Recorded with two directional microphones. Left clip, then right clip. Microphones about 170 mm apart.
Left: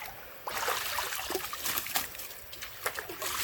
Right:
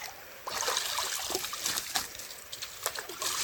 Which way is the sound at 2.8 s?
30° right (ahead or behind).